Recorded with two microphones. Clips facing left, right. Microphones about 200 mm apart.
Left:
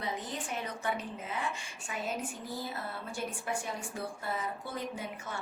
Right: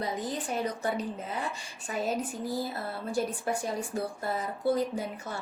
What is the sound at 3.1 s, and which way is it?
A woman's voice, 35° right (ahead or behind).